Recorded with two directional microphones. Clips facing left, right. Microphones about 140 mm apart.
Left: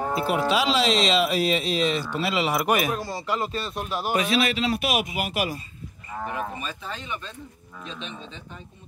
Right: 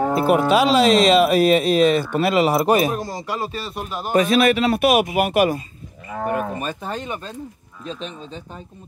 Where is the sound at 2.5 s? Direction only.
30° right (ahead or behind).